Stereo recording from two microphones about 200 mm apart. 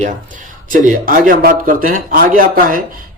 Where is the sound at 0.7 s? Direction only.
40° right (ahead or behind).